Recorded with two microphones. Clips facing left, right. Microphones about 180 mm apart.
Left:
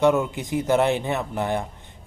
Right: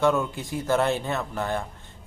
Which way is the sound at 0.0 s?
20° left (ahead or behind).